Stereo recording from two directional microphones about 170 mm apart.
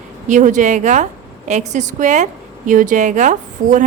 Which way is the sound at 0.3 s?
45° right (ahead or behind).